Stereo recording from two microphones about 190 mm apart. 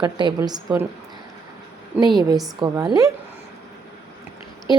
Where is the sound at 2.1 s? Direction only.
20° right (ahead or behind).